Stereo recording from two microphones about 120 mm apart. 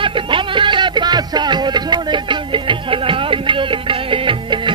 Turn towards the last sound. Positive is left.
turn(degrees=-45)  # may be behind; listen again after turning